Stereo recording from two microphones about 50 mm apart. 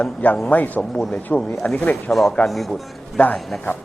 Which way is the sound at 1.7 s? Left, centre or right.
Left.